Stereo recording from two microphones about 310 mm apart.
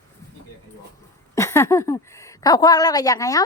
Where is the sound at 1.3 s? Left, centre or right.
Centre.